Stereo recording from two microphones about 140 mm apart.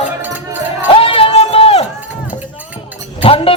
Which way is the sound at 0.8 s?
40° left (ahead or behind).